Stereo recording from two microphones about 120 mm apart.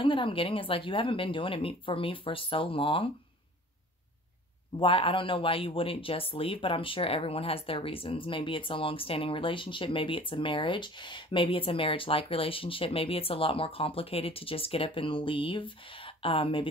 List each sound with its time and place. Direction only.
0.0 s speech: 45° left (ahead or behind)
4.7 s speech: 45° left (ahead or behind)